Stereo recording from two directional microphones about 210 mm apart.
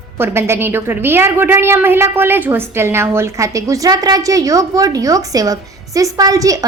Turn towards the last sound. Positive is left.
turn(degrees=-15)  # may be behind; listen again after turning